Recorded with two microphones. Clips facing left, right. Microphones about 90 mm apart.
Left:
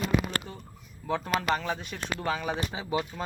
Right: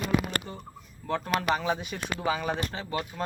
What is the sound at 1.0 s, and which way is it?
Speech, centre (ahead or behind).